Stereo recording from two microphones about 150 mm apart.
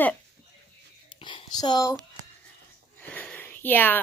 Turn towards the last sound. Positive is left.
turn(degrees=10)  # may be behind; listen again after turning